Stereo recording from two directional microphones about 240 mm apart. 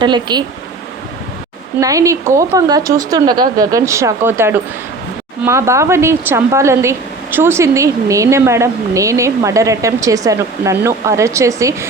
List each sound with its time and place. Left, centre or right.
0.0 s speech: centre
1.8 s speech: centre